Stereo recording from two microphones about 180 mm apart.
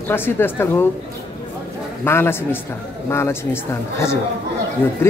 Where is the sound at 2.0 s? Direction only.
15° left (ahead or behind).